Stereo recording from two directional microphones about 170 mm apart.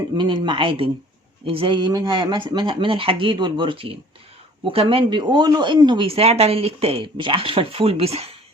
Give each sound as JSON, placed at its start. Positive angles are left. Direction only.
{"t": 0.2, "sound": "speech", "side_deg": -25}